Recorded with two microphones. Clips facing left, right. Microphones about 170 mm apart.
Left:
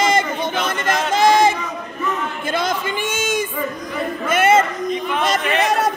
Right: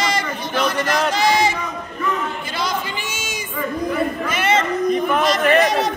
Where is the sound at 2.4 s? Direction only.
50° left (ahead or behind).